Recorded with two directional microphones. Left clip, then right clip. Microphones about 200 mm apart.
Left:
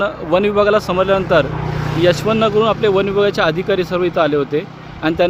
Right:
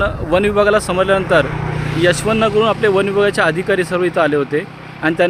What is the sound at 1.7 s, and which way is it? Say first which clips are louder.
Vehicle: even; 25° left (ahead or behind).